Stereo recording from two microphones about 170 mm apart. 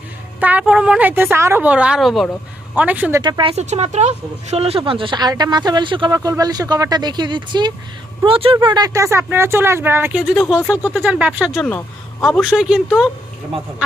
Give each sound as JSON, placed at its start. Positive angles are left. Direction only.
{"t": 0.3, "sound": "a woman's voice", "side_deg": -10}
{"t": 3.2, "sound": "speech", "side_deg": -25}
{"t": 3.5, "sound": "a woman's voice", "side_deg": -40}